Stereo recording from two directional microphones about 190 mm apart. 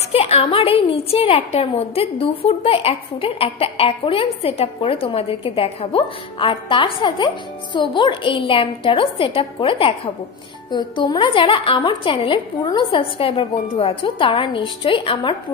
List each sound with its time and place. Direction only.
0.1 s a woman's voice: 30° left (ahead or behind)